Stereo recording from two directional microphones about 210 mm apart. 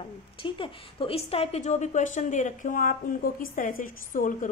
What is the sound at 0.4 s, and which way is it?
A woman's voice, 25° left (ahead or behind).